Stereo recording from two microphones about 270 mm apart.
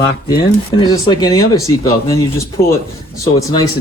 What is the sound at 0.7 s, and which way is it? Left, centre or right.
Speech, centre.